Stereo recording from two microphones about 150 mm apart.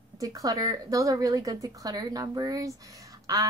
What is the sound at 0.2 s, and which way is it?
Speech, 25° right (ahead or behind).